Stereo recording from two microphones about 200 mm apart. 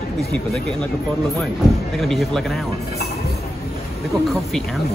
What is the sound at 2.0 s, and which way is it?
Speech, centre (ahead or behind).